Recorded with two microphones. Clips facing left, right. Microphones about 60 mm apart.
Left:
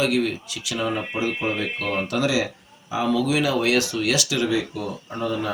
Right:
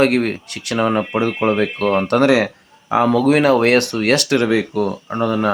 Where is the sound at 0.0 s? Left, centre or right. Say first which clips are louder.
Right 6 dB; right.